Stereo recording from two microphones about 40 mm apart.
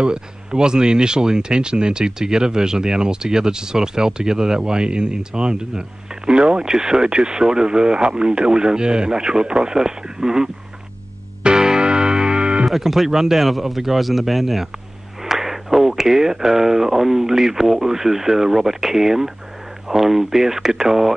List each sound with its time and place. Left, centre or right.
0.0 s speech: right
11.4 s music: centre
12.6 s speech: centre